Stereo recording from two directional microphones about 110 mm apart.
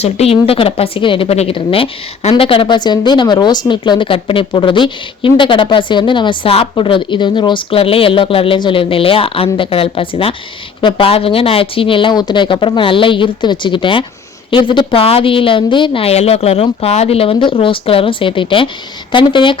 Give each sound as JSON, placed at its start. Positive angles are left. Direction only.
{"t": 0.0, "sound": "a woman's voice", "side_deg": 65}
{"t": 1.3, "sound": "a woman's voice", "side_deg": 65}